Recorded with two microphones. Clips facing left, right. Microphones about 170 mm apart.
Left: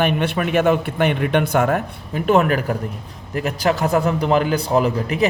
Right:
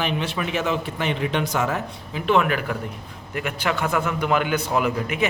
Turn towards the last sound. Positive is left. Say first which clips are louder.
# left 4 dB
turn(degrees=35)  # may be behind; listen again after turning